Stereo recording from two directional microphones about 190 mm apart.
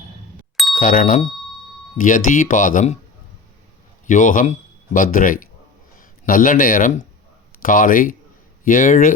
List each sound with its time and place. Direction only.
0.8 s speech: 45° left (ahead or behind)
4.0 s speech: 45° left (ahead or behind)